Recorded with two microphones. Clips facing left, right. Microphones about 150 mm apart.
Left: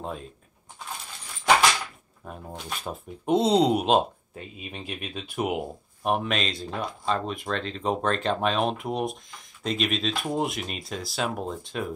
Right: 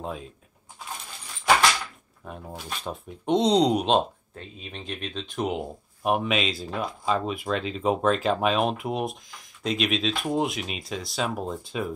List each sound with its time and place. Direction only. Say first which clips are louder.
0.0 s speech: right 1 dB; centre (ahead or behind)
2.2 s speech: even; centre (ahead or behind)
6.0 s speech: right 2 dB; 5° right (ahead or behind)